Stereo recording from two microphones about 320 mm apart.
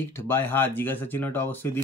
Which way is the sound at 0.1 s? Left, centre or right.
Centre.